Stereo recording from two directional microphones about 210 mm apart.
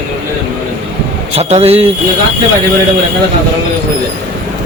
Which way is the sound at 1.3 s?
30° right (ahead or behind).